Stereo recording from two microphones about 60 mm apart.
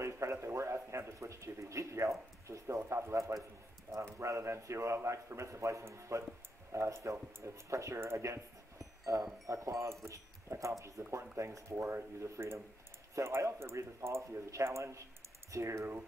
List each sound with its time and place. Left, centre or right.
0.0 s speech: right